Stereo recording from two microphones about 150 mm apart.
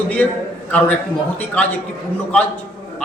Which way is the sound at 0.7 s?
10° left (ahead or behind).